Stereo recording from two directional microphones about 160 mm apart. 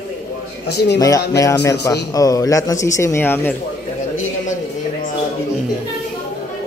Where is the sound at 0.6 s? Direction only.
90° left.